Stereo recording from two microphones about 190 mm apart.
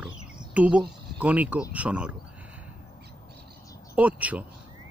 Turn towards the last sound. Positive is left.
turn(degrees=-5)  # may be behind; listen again after turning